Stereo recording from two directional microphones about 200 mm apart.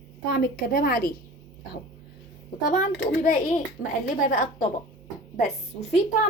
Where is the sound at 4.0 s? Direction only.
40° left (ahead or behind).